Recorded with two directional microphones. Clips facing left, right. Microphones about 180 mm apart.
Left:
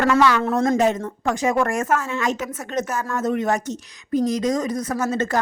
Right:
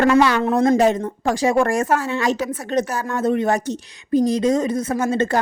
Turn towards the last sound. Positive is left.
turn(degrees=-30)  # may be behind; listen again after turning